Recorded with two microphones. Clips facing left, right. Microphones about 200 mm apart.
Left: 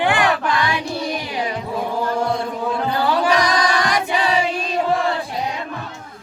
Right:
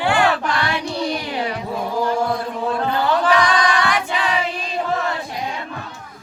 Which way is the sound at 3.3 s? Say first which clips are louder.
Even; 40° left (ahead or behind).